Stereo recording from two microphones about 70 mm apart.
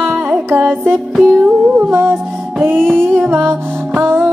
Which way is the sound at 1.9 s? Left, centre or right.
Right.